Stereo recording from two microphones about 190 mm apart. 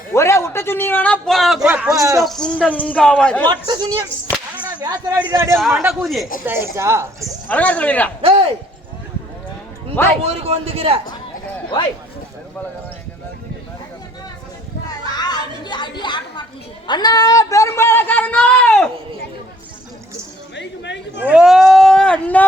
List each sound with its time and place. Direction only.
0.1 s a sound: 15° left (ahead or behind); by 2.0 s 10° right (ahead or behind)
2.2 s speech: 5° left (ahead or behind)
3.4 s speech: 25° right (ahead or behind)
5.2 s a woman's voice: 15° right (ahead or behind)
5.5 s speech: centre (ahead or behind)
6.4 s a woman's voice: 10° right (ahead or behind)
7.4 s speech: 10° left (ahead or behind)
8.2 s speech: 30° right (ahead or behind)
10.2 s a man's voice: 30° right (ahead or behind)
14.8 s a sound: 20° left (ahead or behind); by 18.9 s 5° left (ahead or behind)
20.6 s chatter: 70° left (ahead or behind)
21.2 s speech: 5° right (ahead or behind)